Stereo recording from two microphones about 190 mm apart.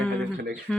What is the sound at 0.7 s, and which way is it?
Speech, centre (ahead or behind).